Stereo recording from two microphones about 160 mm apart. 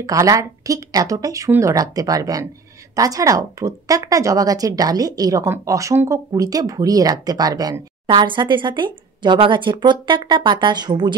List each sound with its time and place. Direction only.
0.0 s speech: 20° right (ahead or behind)